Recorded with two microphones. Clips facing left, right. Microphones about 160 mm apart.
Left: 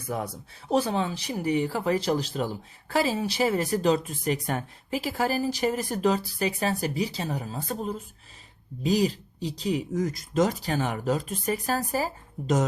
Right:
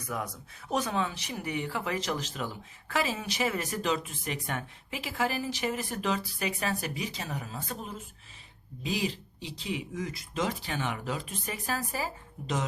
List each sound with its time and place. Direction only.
0.1 s speech: 30° left (ahead or behind)